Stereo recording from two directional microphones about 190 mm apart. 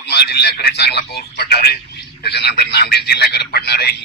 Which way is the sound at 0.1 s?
60° left (ahead or behind).